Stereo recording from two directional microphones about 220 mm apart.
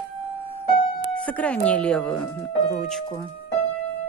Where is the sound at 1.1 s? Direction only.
5° left (ahead or behind).